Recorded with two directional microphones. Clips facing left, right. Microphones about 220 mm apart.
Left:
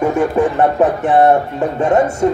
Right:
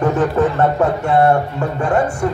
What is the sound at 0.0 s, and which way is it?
Speech, 10° left (ahead or behind).